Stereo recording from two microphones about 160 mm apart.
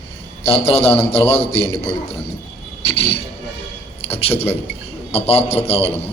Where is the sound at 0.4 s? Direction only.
35° left (ahead or behind).